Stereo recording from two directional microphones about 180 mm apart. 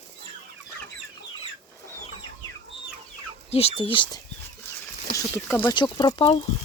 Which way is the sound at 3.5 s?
35° left (ahead or behind).